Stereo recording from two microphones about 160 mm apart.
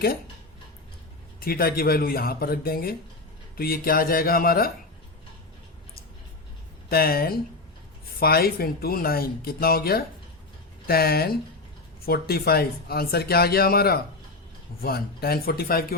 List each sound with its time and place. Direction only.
1.4 s speech: 70° left (ahead or behind)
6.8 s speech: 70° left (ahead or behind)
12.3 s speech: 75° left (ahead or behind)